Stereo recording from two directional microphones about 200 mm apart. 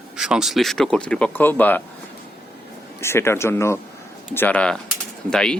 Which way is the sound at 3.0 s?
10° left (ahead or behind).